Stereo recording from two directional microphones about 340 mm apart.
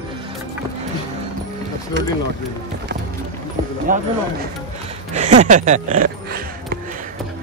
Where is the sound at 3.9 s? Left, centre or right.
Right.